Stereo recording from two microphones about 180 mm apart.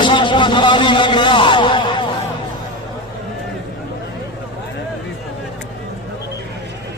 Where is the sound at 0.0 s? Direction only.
25° left (ahead or behind).